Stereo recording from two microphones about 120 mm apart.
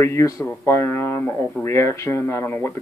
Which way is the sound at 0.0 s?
25° left (ahead or behind).